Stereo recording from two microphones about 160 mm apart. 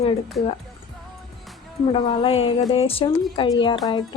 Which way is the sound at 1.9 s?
35° left (ahead or behind).